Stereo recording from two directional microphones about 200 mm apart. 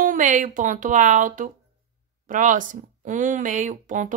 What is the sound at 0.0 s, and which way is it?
Speech, 40° right (ahead or behind).